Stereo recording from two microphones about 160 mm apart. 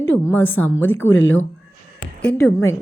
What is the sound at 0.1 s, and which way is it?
Speech, 10° left (ahead or behind).